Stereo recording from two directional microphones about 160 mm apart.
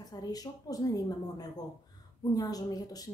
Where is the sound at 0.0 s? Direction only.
25° left (ahead or behind).